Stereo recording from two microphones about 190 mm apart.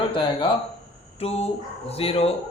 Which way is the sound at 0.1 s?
25° left (ahead or behind).